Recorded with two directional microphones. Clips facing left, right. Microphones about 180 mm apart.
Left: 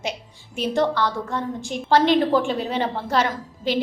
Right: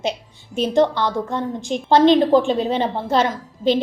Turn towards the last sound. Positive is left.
turn(degrees=-20)  # may be behind; listen again after turning